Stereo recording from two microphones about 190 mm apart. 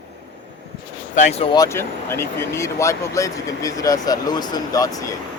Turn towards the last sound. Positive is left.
turn(degrees=20)  # may be behind; listen again after turning